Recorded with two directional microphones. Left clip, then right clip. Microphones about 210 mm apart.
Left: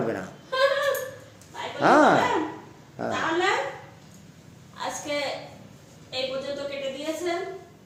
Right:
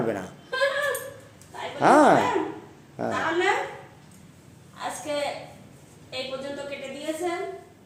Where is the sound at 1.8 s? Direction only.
15° right (ahead or behind).